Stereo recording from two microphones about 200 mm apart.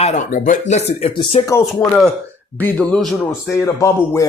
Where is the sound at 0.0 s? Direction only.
35° left (ahead or behind).